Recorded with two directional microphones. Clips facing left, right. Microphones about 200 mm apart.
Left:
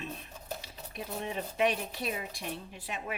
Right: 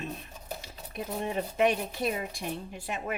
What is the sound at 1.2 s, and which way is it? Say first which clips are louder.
Speech: right 4 dB; 45° right (ahead or behind).